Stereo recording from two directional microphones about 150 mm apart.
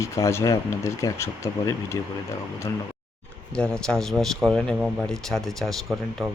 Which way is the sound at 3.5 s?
5° left (ahead or behind).